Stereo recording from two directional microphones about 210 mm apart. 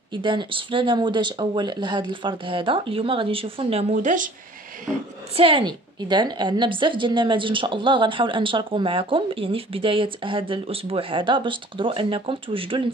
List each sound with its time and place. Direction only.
0.1 s speech: 25° right (ahead or behind)
3.9 s speech: 40° right (ahead or behind)
4.8 s speech: 25° right (ahead or behind)